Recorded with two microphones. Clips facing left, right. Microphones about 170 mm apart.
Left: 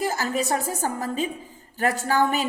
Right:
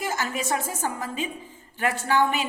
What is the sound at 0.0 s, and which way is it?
A woman's voice, 35° left (ahead or behind).